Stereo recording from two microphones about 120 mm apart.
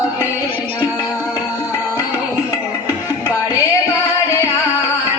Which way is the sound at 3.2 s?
30° left (ahead or behind).